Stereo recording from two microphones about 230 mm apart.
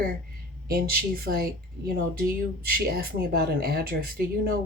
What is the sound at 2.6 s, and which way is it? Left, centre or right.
Speech, right.